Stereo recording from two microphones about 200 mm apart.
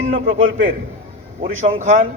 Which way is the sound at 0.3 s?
40° right (ahead or behind).